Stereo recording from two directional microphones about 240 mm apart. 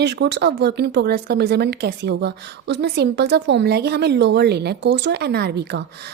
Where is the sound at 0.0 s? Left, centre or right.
Right.